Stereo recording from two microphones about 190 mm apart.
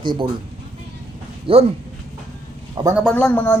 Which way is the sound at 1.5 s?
30° right (ahead or behind).